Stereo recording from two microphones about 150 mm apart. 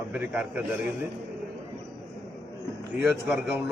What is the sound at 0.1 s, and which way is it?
Speech, 10° right (ahead or behind).